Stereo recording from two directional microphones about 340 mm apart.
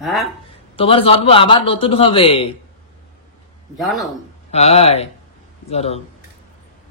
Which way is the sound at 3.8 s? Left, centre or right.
Centre.